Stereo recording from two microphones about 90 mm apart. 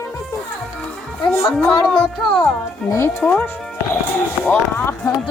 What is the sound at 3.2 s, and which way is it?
Speech, 15° left (ahead or behind).